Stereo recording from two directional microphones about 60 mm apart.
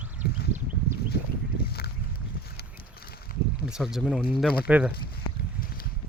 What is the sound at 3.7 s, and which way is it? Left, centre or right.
Speech, centre.